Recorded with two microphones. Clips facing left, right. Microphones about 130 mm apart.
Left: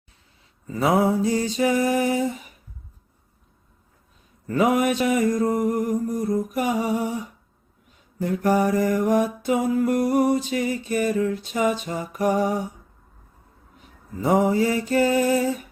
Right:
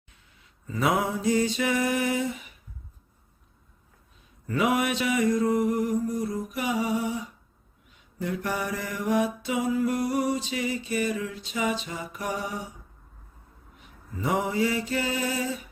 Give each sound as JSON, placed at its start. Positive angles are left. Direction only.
{"t": 0.7, "sound": "a sound", "side_deg": 35}
{"t": 4.4, "sound": "mantra", "side_deg": 40}
{"t": 14.2, "sound": "mantra", "side_deg": 40}